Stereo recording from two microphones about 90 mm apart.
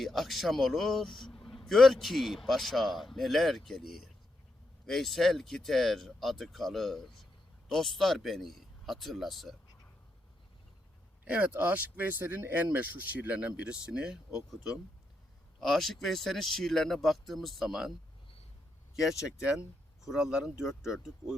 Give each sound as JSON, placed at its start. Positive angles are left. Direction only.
{"t": 0.0, "sound": "a man's voice", "side_deg": 0}
{"t": 11.3, "sound": "a man's voice", "side_deg": -15}
{"t": 20.1, "sound": "a man's voice", "side_deg": -5}